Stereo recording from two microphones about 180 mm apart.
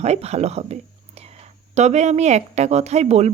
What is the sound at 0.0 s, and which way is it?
A woman's voice, 35° right (ahead or behind).